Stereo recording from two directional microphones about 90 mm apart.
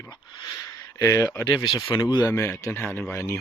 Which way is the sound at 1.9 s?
55° left (ahead or behind).